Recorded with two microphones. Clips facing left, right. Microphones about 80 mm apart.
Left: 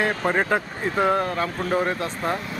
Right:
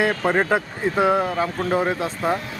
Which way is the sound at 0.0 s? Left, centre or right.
Centre.